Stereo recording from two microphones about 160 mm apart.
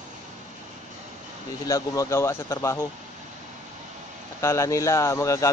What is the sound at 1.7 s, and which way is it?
Speech, 20° left (ahead or behind).